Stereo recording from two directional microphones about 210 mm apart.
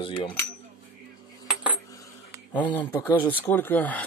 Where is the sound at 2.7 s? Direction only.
10° left (ahead or behind).